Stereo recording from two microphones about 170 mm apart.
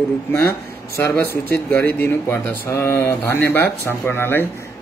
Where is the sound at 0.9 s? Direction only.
15° left (ahead or behind).